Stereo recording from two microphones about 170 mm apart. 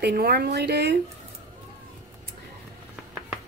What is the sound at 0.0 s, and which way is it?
Speech, 65° right (ahead or behind).